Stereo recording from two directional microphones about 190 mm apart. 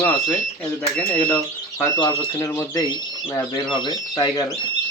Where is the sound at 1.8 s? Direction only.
20° left (ahead or behind).